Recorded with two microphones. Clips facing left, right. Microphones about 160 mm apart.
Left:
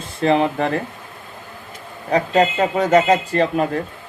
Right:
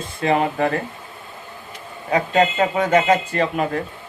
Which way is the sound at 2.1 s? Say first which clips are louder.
Left 1 dB; 35° left (ahead or behind).